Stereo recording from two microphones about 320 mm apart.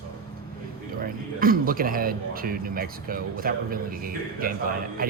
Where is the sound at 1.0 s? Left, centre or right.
Right.